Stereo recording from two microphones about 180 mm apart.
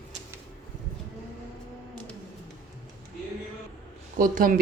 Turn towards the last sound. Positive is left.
turn(degrees=-50)  # may be behind; listen again after turning